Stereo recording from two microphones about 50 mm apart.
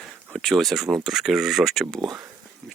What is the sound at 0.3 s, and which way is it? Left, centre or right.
Speech, centre.